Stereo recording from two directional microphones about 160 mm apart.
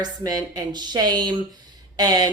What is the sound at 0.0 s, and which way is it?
Speech, 25° right (ahead or behind).